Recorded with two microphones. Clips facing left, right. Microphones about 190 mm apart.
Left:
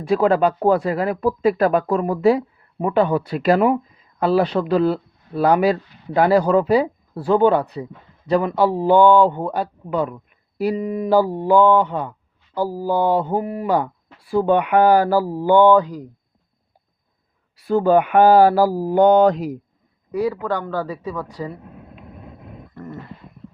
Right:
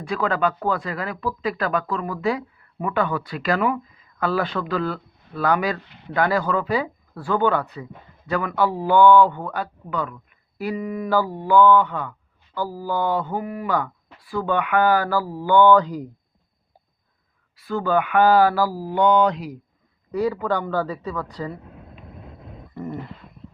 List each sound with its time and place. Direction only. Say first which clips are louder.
0.1 s speech: left 7 dB; 40° left (ahead or behind)
5.8 s speech: even; 70° right (ahead or behind)
6.1 s a man's voice: left 6 dB; 35° left (ahead or behind)
10.8 s speech: left 5 dB; 35° left (ahead or behind)
17.7 s speech: left 6 dB; 40° left (ahead or behind)
20.1 s a woman's voice: left 1 dB; 10° left (ahead or behind)
22.7 s a sound: right 4 dB; 10° right (ahead or behind)